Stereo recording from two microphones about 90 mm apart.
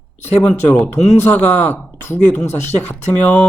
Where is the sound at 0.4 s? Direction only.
15° left (ahead or behind).